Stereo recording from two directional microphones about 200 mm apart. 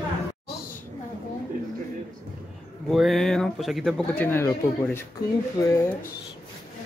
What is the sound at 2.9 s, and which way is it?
Speech, centre (ahead or behind).